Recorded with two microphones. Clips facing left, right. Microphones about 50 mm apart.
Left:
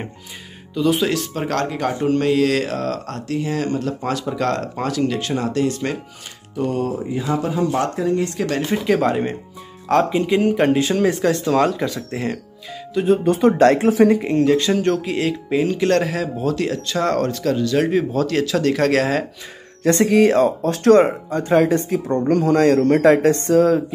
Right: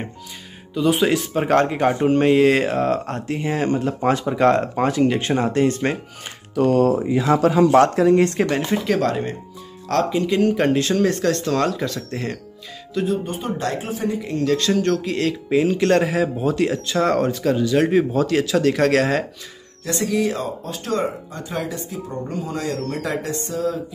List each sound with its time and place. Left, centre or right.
0.7 s speech: centre; by 5.9 s right
6.5 s speech: right
8.6 s speech: centre
10.5 s speech: centre
13.2 s speech: left
14.4 s speech: centre
15.9 s speech: centre
19.8 s speech: left
20.4 s speech: left
21.3 s speech: left
23.0 s speech: left